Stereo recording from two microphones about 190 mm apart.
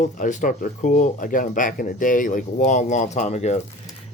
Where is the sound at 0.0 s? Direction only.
40° left (ahead or behind).